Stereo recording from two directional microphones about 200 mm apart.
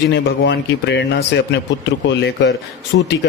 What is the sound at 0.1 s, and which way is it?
A man's voice, 60° left (ahead or behind).